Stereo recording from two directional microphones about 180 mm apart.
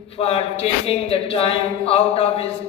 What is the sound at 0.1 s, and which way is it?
Speech, 35° left (ahead or behind).